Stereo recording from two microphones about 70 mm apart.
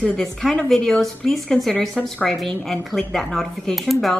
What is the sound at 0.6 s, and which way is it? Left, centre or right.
A woman's voice, centre.